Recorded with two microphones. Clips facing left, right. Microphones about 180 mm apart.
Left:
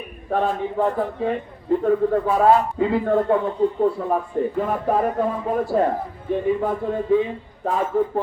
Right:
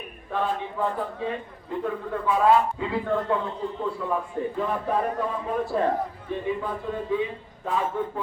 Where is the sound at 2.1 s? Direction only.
45° left (ahead or behind).